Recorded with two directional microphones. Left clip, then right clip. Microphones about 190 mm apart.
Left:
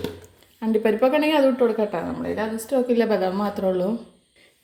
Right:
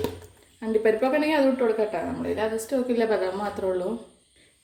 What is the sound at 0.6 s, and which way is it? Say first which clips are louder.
Speech: left 2 dB; 45° left (ahead or behind).